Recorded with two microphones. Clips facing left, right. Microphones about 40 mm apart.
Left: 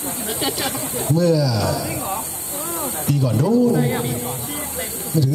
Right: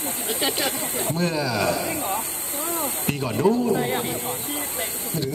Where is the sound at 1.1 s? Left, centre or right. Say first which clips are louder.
Left 8 dB; right.